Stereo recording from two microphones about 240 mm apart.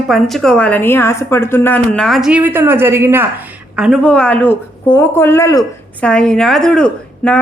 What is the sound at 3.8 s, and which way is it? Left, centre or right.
Speech, centre.